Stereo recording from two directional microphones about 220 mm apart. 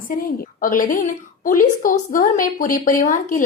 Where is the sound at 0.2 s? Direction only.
40° left (ahead or behind).